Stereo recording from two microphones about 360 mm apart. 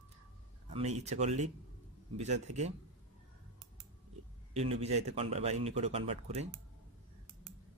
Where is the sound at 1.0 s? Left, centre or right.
Centre.